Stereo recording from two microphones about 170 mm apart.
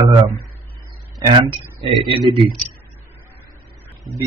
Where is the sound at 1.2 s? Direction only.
30° right (ahead or behind).